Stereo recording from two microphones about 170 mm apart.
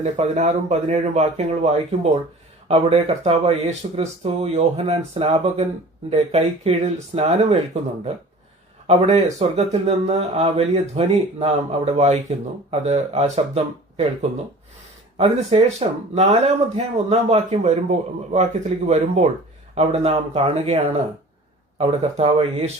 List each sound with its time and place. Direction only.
0.0 s speech: 45° right (ahead or behind)